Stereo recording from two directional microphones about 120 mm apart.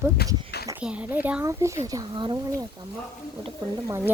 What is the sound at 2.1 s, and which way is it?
Speech, 45° right (ahead or behind).